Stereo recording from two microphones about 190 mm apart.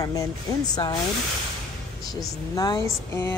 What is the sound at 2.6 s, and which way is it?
Speech, 15° left (ahead or behind).